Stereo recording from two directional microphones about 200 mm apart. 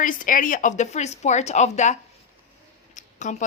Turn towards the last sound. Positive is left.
turn(degrees=35)  # may be behind; listen again after turning